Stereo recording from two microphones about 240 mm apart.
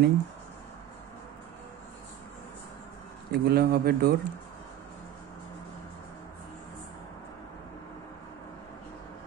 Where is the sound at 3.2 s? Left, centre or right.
Right.